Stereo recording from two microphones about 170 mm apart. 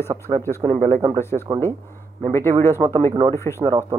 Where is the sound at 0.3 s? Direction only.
35° right (ahead or behind).